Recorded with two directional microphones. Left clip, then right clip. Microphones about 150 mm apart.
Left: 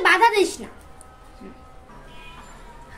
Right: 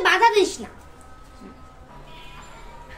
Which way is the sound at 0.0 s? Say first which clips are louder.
Even; 40° left (ahead or behind).